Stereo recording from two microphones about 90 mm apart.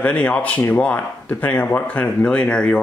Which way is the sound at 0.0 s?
15° left (ahead or behind).